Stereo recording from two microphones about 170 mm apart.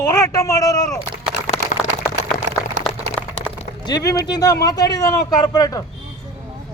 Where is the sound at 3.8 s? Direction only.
20° left (ahead or behind).